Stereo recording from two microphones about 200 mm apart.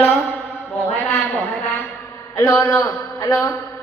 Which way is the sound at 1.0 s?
15° left (ahead or behind).